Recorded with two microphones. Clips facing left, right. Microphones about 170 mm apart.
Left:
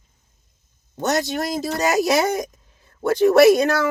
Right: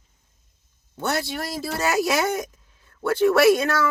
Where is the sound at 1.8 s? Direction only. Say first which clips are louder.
Left 3 dB; 40° left (ahead or behind).